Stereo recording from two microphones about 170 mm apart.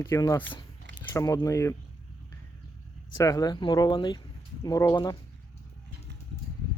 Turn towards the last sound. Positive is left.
turn(degrees=25)  # may be behind; listen again after turning